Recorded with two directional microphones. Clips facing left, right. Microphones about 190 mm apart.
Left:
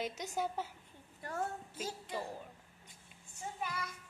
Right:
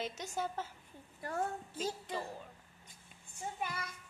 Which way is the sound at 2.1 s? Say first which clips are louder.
Even; 10° left (ahead or behind).